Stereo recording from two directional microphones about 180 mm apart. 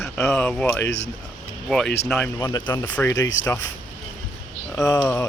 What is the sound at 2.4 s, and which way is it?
Speech, 20° left (ahead or behind).